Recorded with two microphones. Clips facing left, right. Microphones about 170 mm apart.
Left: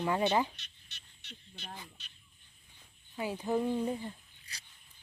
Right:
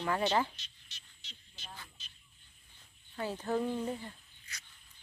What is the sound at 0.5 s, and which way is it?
Insect, 60° left (ahead or behind).